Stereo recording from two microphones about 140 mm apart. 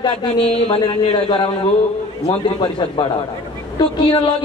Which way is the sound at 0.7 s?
45° left (ahead or behind).